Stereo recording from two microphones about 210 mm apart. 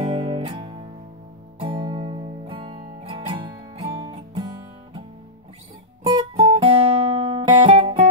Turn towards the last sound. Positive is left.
turn(degrees=-25)  # may be behind; listen again after turning